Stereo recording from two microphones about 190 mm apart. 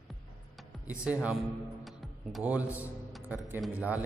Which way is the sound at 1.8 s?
5° right (ahead or behind).